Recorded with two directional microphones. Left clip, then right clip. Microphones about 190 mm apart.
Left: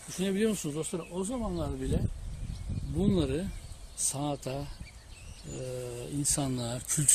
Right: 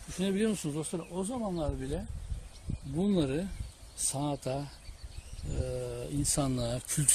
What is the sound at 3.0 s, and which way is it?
Speech, 50° right (ahead or behind).